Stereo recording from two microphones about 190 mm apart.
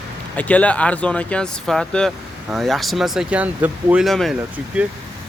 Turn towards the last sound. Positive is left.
turn(degrees=-5)  # may be behind; listen again after turning